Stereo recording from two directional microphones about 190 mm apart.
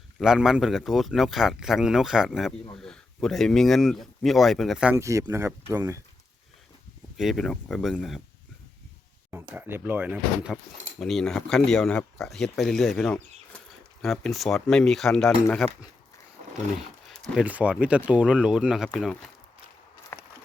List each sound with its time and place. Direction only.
0.2 s speech: 5° right (ahead or behind)
4.9 s speech: 15° right (ahead or behind)
7.2 s speech: centre (ahead or behind)
9.3 s speech: 10° right (ahead or behind); by 15.7 s 5° left (ahead or behind)
17.1 s speech: centre (ahead or behind)
20.1 s a sound: 10° left (ahead or behind)